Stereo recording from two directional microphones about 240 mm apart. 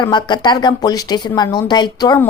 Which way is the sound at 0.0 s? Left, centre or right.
Centre.